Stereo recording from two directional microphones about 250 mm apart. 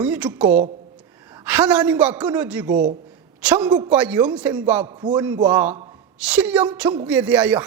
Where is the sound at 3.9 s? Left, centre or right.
Centre.